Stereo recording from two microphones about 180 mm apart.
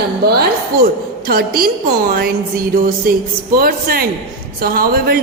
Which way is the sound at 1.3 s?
55° right (ahead or behind).